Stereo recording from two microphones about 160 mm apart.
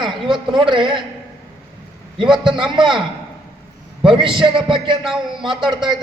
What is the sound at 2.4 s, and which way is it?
Speech, 30° right (ahead or behind).